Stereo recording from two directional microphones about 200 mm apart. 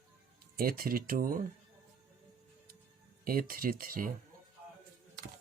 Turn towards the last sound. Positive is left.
turn(degrees=-45)  # may be behind; listen again after turning